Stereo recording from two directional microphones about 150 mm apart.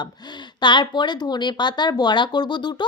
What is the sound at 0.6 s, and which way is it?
Speech, 30° left (ahead or behind).